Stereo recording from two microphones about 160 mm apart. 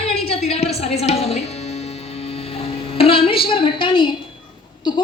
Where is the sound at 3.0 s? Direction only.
35° left (ahead or behind).